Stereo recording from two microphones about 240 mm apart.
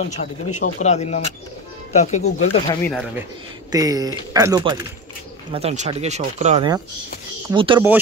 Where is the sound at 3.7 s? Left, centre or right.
Centre.